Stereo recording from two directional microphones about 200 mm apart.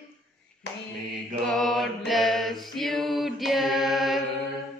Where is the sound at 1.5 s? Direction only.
Centre (ahead or behind).